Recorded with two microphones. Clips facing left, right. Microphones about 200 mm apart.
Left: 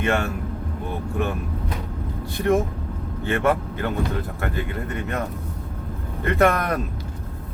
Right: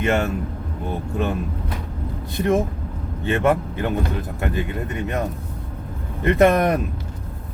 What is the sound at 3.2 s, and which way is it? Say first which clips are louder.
Speech: right 2 dB; 20° right (ahead or behind).